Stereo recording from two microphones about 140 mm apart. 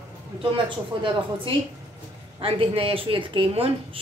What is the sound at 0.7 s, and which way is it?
Speech, 40° right (ahead or behind).